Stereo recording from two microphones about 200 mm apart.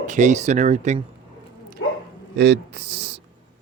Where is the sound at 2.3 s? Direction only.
55° right (ahead or behind).